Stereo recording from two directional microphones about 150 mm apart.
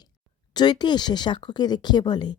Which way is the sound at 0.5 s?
30° left (ahead or behind).